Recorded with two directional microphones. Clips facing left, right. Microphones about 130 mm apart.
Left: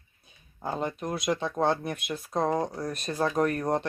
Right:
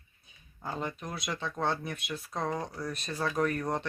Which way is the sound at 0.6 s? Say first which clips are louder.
Left 5 dB; 30° left (ahead or behind).